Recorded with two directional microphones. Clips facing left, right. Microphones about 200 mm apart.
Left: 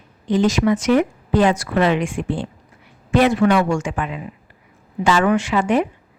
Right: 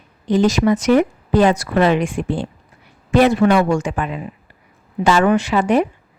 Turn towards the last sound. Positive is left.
turn(degrees=-35)  # may be behind; listen again after turning